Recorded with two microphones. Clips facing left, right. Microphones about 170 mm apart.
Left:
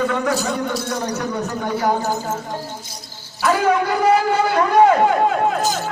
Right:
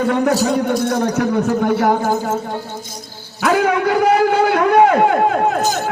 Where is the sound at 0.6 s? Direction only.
55° right (ahead or behind).